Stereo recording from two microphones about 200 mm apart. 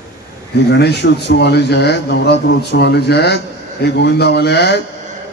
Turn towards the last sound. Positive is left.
turn(degrees=55)  # may be behind; listen again after turning